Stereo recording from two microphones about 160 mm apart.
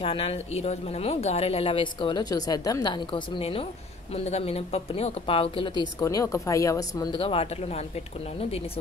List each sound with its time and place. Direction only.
0.0 s speech: 35° left (ahead or behind)
7.2 s speech: 35° left (ahead or behind)